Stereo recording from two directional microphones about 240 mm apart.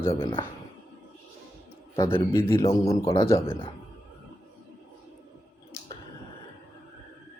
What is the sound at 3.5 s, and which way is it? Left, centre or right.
Speech, left.